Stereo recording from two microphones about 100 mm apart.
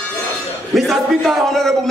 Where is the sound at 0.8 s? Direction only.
Centre (ahead or behind).